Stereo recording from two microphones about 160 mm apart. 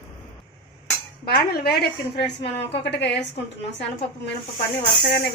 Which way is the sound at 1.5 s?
75° left (ahead or behind).